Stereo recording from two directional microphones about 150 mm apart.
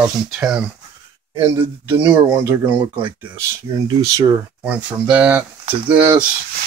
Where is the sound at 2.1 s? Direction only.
10° right (ahead or behind).